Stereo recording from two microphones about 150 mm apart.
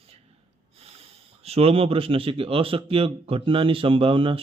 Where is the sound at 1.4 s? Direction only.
40° right (ahead or behind).